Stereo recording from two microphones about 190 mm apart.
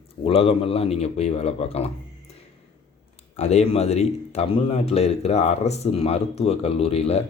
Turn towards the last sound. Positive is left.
turn(degrees=30)  # may be behind; listen again after turning